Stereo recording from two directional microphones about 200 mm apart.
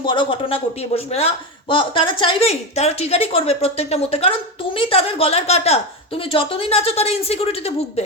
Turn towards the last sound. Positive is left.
turn(degrees=30)  # may be behind; listen again after turning